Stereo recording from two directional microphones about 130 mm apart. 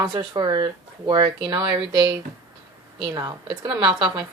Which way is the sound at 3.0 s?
30° right (ahead or behind).